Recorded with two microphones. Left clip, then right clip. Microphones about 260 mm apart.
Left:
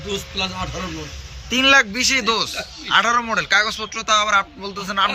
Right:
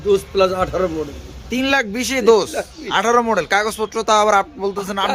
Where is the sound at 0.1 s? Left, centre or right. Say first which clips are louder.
Right 10 dB; centre.